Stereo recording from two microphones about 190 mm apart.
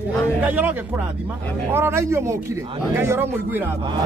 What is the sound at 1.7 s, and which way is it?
Speech, 15° right (ahead or behind).